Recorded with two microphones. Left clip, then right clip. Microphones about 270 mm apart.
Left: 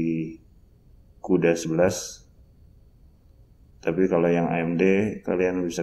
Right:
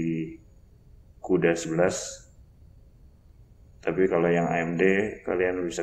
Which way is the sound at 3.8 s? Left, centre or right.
Left.